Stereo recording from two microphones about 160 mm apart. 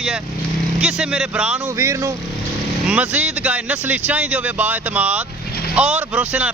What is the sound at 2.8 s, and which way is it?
Speech, 5° right (ahead or behind).